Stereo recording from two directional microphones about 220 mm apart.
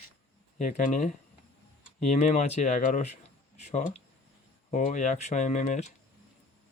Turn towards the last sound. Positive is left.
turn(degrees=35)  # may be behind; listen again after turning